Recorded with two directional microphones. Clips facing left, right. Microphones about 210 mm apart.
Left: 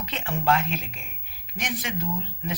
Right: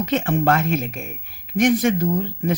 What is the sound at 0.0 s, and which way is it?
Speech, 45° right (ahead or behind).